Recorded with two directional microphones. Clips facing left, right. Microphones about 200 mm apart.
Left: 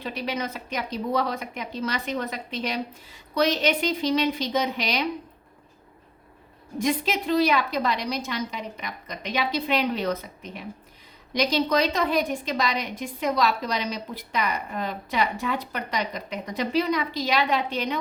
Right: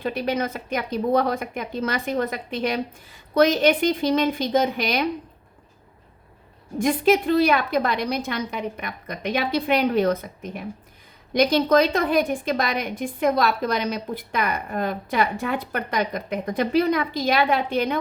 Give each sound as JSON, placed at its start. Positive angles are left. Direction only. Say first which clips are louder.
{"t": 0.0, "sound": "a woman's voice", "louder": "right 5 dB", "side_deg": -50}
{"t": 6.7, "sound": "a woman's voice", "louder": "right 6 dB", "side_deg": -50}